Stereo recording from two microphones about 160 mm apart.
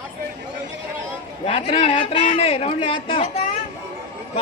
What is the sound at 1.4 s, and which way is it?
A man's voice, 35° left (ahead or behind).